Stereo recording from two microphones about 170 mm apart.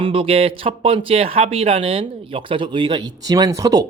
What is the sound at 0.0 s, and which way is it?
Speech, 30° right (ahead or behind).